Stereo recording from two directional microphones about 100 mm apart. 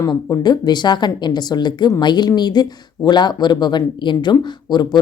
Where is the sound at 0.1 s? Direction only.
45° left (ahead or behind).